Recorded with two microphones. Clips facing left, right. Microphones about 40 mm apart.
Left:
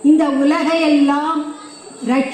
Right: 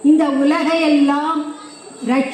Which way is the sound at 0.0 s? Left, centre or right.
Centre.